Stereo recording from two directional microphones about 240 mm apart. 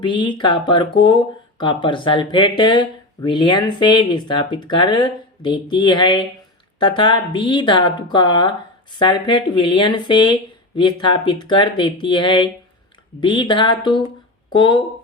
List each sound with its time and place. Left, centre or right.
0.0 s speech: centre